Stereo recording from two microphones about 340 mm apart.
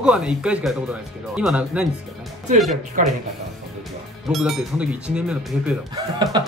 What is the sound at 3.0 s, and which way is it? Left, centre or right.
Speech, right.